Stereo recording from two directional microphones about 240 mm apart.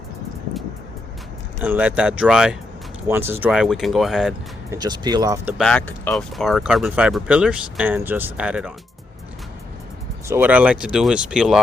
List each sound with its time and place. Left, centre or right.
1.6 s speech: centre
4.7 s speech: centre
5.5 s speech: centre
10.2 s speech: centre